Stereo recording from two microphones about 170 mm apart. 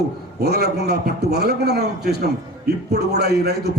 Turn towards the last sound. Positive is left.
turn(degrees=-70)  # may be behind; listen again after turning